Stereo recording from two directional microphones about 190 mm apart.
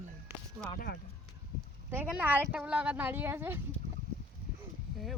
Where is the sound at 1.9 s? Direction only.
10° right (ahead or behind).